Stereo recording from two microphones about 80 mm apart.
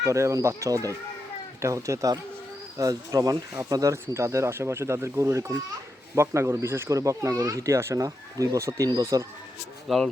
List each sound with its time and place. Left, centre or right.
0.0 s speech: right
9.9 s speech: centre